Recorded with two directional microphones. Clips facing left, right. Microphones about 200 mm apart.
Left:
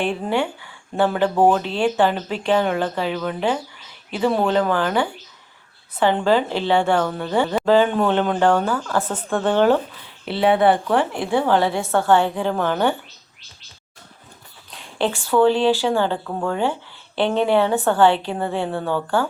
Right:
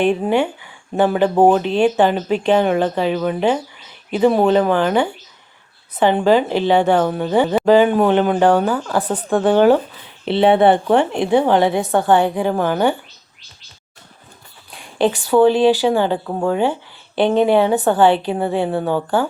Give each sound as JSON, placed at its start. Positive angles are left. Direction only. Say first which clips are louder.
{"t": 0.0, "sound": "a woman's voice", "louder": "right 6 dB", "side_deg": -20}
{"t": 10.2, "sound": "speech", "louder": "right 4 dB", "side_deg": -25}
{"t": 14.7, "sound": "a woman's voice", "louder": "right 5 dB", "side_deg": -15}